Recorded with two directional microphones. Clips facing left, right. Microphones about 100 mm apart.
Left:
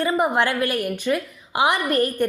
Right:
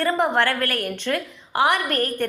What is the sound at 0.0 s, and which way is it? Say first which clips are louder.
A woman's voice: even; 15° left (ahead or behind).